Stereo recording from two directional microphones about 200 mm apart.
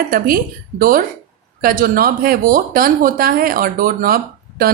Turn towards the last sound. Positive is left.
turn(degrees=-45)  # may be behind; listen again after turning